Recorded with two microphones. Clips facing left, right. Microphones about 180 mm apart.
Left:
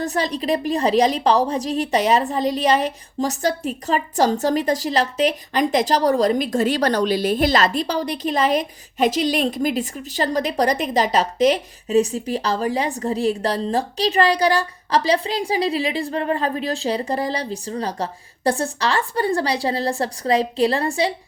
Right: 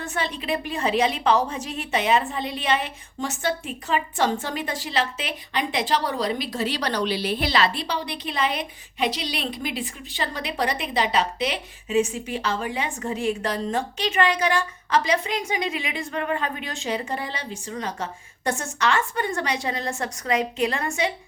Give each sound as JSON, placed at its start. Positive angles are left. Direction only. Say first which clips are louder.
{"t": 0.0, "sound": "a woman's voice", "louder": "left 7 dB", "side_deg": 35}